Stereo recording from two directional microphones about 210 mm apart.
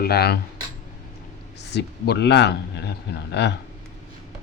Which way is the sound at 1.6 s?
50° left (ahead or behind).